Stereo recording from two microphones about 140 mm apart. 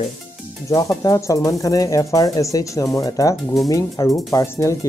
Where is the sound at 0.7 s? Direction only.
25° left (ahead or behind).